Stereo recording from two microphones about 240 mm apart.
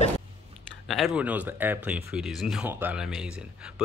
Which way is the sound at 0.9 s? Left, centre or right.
Centre.